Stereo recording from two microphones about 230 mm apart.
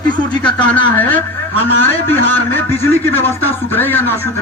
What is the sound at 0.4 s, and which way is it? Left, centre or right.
A man's voice, centre.